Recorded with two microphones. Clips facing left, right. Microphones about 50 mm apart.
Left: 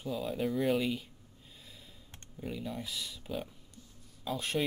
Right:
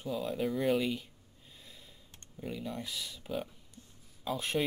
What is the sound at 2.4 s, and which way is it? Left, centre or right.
Speech, centre.